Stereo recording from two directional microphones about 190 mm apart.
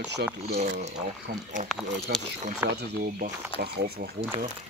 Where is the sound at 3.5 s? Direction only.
55° right (ahead or behind).